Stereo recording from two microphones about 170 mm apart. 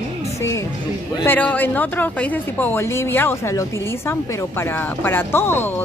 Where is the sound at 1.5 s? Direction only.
10° left (ahead or behind).